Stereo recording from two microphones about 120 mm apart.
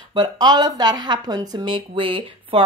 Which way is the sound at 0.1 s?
35° right (ahead or behind).